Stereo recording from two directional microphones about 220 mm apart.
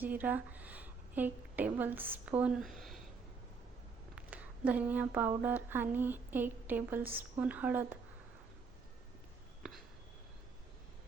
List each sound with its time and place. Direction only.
0.0 s a woman's voice: 10° right (ahead or behind)
4.1 s a sound: 5° right (ahead or behind)
5.4 s a woman's voice: 10° right (ahead or behind)